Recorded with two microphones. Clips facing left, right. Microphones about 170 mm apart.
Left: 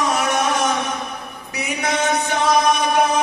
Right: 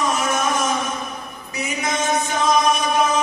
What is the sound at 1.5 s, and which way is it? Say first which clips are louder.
Chant: left 2 dB; 65° left (ahead or behind).